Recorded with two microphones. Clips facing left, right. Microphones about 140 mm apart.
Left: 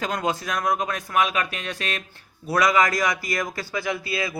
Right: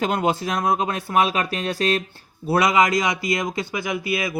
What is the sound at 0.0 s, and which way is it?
Speech, 30° right (ahead or behind).